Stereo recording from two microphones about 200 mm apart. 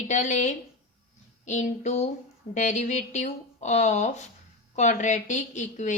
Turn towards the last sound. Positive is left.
turn(degrees=35)  # may be behind; listen again after turning